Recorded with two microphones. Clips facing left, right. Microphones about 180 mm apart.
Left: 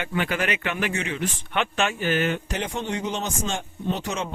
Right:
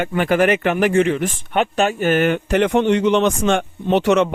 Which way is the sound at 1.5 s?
40° right (ahead or behind).